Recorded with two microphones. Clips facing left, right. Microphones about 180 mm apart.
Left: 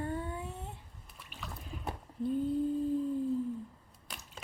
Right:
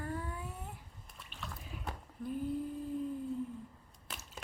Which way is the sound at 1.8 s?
30° left (ahead or behind).